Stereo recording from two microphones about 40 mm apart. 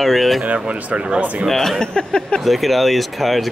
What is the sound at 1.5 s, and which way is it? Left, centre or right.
Speech, centre.